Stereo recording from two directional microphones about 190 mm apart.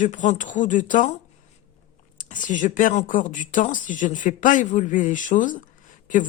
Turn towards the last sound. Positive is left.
turn(degrees=40)  # may be behind; listen again after turning